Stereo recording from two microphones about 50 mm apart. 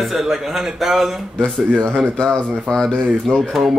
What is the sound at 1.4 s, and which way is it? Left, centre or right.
Speech, centre.